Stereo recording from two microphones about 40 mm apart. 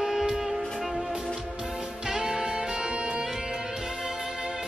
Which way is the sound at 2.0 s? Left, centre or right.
Centre.